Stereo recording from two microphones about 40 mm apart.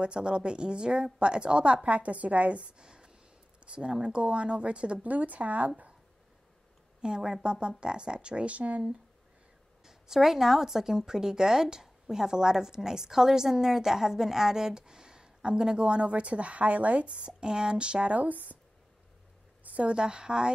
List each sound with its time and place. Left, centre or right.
0.0 s a woman's voice: right
2.8 s a sound: right
3.6 s speech: right
5.1 s a woman's voice: right
7.0 s a woman's voice: centre; by 8.9 s right
9.8 s a woman's voice: centre; by 17.3 s right
17.3 s speech: centre
18.1 s a woman's voice: right
19.6 s a sound: right
19.9 s speech: right